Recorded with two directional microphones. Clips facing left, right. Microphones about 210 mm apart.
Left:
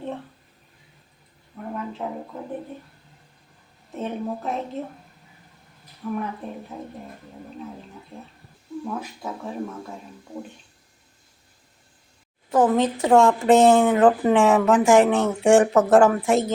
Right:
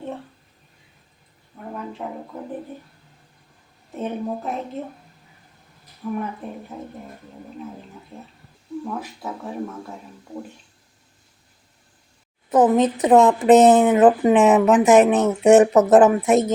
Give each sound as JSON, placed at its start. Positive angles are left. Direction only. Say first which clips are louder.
{"t": 3.9, "sound": "speech", "louder": "right 2 dB", "side_deg": 0}
{"t": 6.0, "sound": "speech", "louder": "right 1 dB", "side_deg": -5}
{"t": 8.8, "sound": "speech", "louder": "even", "side_deg": 0}
{"t": 12.5, "sound": "speech", "louder": "right 3 dB", "side_deg": -20}